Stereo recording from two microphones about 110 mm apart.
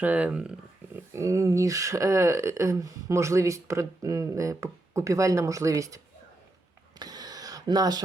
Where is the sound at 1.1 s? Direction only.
30° right (ahead or behind).